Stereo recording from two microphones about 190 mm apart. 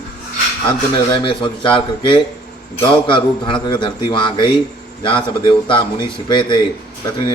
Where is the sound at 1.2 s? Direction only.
25° left (ahead or behind).